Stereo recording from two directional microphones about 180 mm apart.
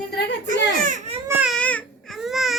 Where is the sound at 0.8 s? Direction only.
45° right (ahead or behind).